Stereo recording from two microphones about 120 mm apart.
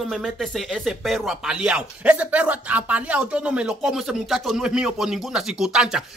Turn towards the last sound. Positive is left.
turn(degrees=-5)  # may be behind; listen again after turning